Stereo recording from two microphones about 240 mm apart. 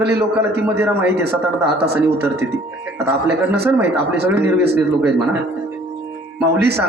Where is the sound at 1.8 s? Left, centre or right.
Right.